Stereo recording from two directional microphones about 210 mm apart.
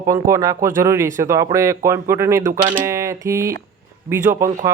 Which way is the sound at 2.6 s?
35° right (ahead or behind).